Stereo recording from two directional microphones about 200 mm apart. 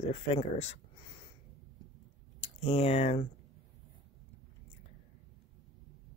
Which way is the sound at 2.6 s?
30° left (ahead or behind).